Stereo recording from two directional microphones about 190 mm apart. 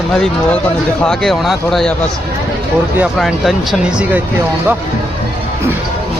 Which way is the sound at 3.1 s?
Centre (ahead or behind).